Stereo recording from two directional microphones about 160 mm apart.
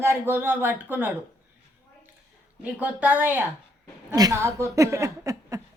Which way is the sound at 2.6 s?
10° right (ahead or behind).